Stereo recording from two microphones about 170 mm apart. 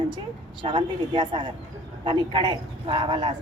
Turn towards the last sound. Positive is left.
turn(degrees=-25)  # may be behind; listen again after turning